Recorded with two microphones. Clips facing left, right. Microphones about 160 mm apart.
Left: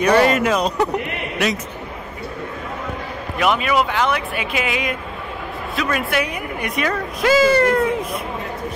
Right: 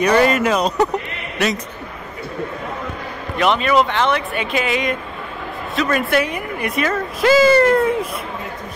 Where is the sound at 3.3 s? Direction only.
5° left (ahead or behind).